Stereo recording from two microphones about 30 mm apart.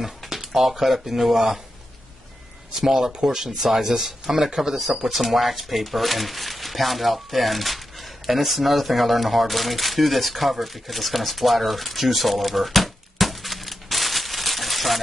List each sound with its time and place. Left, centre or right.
0.5 s speech: centre
2.7 s speech: centre
3.1 s speech: right; by 15.0 s centre